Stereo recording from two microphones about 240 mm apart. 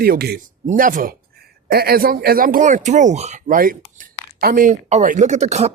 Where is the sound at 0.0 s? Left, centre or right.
Right.